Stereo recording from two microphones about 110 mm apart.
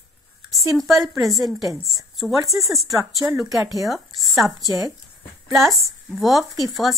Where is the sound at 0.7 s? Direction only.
Centre (ahead or behind).